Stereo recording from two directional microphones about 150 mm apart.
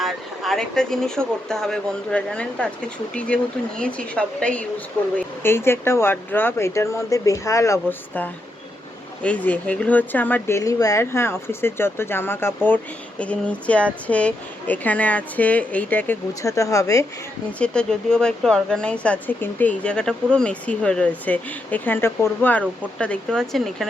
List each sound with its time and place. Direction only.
0.0 s a sound: centre (ahead or behind)
1.5 s speech: 5° left (ahead or behind); by 17.1 s 20° left (ahead or behind)
17.6 s speech: 5° left (ahead or behind)